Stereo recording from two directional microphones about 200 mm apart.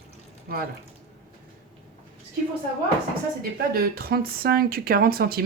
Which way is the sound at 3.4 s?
50° right (ahead or behind).